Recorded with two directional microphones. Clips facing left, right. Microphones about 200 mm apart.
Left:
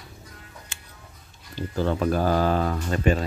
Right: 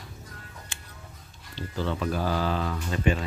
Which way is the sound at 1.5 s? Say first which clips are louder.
Left 5 dB; 45° left (ahead or behind).